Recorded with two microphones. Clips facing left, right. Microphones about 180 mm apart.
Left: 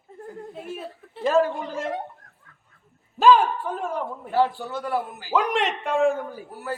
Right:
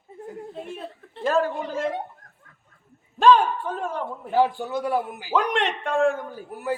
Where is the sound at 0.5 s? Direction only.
5° left (ahead or behind).